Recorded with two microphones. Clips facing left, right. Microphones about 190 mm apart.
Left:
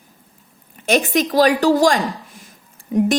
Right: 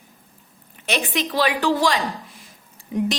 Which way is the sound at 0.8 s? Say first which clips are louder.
Left 7 dB; 45° left (ahead or behind).